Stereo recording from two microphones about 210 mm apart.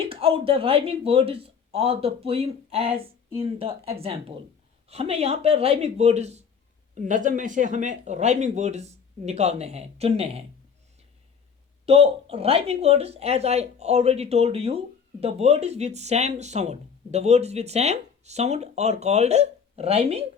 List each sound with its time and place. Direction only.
0.0 s speech: 25° right (ahead or behind)
11.9 s speech: 30° right (ahead or behind)